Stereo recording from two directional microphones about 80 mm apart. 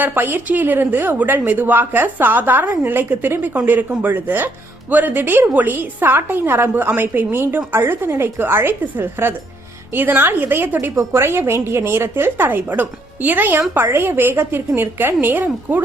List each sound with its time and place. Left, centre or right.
0.0 s a woman's voice: right